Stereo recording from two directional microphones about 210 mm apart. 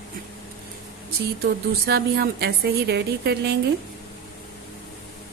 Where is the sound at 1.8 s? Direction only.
50° right (ahead or behind).